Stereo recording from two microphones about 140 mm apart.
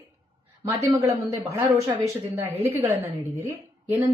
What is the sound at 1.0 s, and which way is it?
Speech, 20° right (ahead or behind).